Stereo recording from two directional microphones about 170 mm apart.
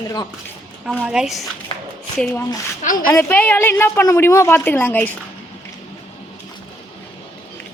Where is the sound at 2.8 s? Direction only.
55° left (ahead or behind).